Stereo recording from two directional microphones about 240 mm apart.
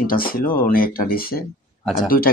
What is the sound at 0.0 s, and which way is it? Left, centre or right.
Speech, left.